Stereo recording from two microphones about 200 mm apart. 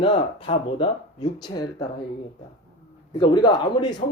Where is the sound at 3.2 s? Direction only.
20° left (ahead or behind).